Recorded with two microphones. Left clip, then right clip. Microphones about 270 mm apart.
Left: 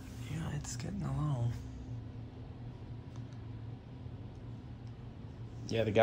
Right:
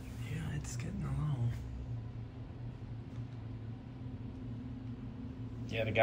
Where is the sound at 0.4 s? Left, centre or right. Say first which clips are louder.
Left 3 dB; centre.